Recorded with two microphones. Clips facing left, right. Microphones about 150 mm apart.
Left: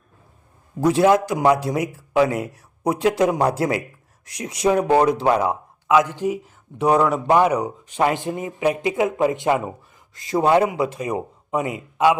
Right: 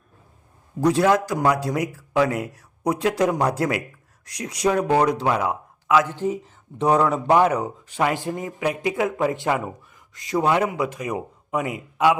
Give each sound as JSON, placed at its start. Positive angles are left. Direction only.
{"t": 0.9, "sound": "speech", "side_deg": 25}
{"t": 5.9, "sound": "a man's voice", "side_deg": 15}